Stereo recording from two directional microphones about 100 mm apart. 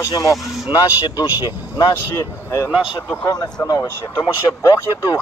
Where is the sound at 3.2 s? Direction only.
40° left (ahead or behind).